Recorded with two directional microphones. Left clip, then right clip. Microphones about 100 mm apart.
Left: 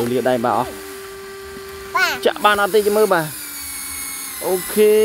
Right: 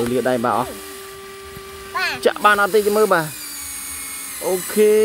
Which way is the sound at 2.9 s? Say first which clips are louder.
Even; 5° left (ahead or behind).